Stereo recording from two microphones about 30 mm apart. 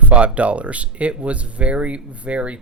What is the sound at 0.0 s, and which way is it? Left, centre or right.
Music, right.